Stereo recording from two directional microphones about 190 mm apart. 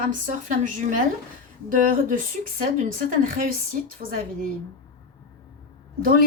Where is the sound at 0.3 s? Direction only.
40° right (ahead or behind).